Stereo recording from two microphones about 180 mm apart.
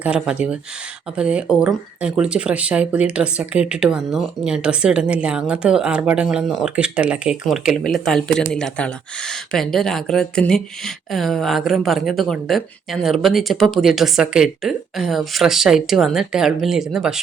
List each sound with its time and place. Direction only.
0.0 s speech: 5° right (ahead or behind)